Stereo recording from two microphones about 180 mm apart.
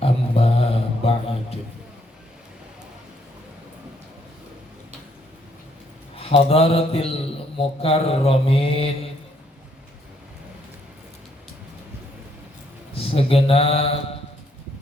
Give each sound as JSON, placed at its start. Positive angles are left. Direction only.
{"t": 0.0, "sound": "mantra", "side_deg": 30}
{"t": 6.1, "sound": "speech", "side_deg": 30}
{"t": 7.8, "sound": "mantra", "side_deg": 30}
{"t": 12.9, "sound": "speech", "side_deg": 30}